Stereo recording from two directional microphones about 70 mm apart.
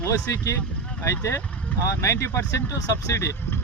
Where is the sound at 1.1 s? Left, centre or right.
Left.